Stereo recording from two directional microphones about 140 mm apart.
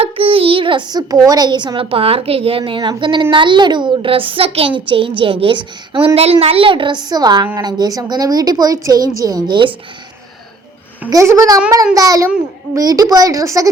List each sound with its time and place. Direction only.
0.0 s a child's voice: 40° right (ahead or behind)
6.1 s a child's voice: 45° right (ahead or behind)
11.1 s a woman's voice: 25° right (ahead or behind)